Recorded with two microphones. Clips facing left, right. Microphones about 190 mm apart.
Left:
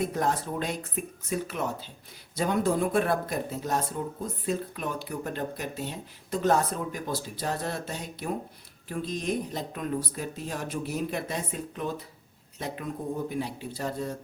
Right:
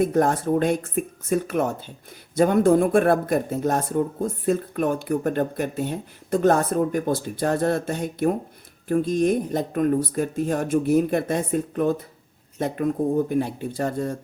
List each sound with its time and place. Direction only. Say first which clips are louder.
0.0 s speech: right 8 dB; 50° right (ahead or behind)